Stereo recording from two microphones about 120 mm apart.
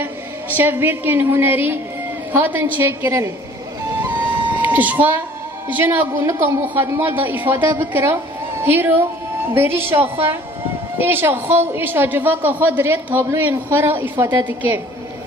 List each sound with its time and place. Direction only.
0.0 s a woman's voice: 15° right (ahead or behind)
4.1 s music: 15° right (ahead or behind)
4.5 s a sound: 15° right (ahead or behind)
5.7 s a woman's voice: 15° right (ahead or behind)